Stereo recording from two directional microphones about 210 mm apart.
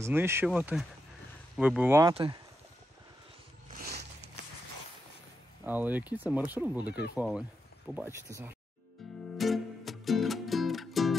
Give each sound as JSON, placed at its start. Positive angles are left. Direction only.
{"t": 0.0, "sound": "speech", "side_deg": -10}
{"t": 2.1, "sound": "speech", "side_deg": -25}
{"t": 3.8, "sound": "a sound", "side_deg": -50}
{"t": 5.7, "sound": "speech", "side_deg": -10}
{"t": 9.0, "sound": "music", "side_deg": 0}